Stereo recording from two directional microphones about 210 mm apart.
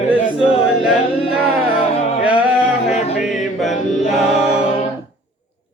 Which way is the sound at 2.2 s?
5° right (ahead or behind).